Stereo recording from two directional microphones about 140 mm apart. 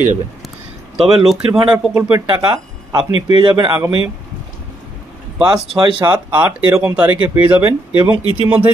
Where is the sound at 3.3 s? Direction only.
30° right (ahead or behind).